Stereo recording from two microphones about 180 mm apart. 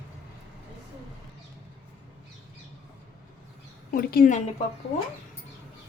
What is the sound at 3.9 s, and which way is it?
Speech, 55° left (ahead or behind).